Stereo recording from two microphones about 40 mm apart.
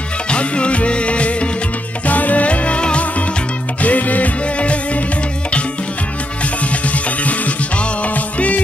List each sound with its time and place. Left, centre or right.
0.3 s music: left
3.8 s music: left
6.6 s music: left